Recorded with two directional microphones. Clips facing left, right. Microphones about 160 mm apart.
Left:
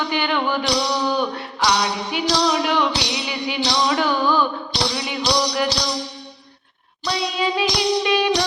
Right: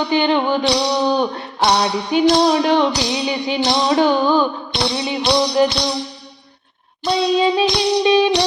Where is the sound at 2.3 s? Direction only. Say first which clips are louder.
Right 5 dB; 55° right (ahead or behind).